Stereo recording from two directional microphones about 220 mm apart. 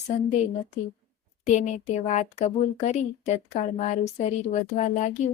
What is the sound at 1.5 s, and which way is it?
Speech, 35° left (ahead or behind).